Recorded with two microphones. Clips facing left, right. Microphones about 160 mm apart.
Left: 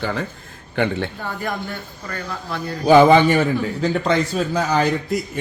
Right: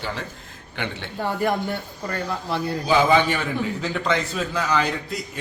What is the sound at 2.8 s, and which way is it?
A man's voice, 55° left (ahead or behind).